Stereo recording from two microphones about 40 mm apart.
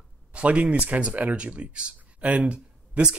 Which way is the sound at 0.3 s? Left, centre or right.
Right.